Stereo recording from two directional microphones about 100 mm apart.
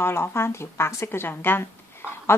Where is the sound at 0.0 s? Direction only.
25° left (ahead or behind).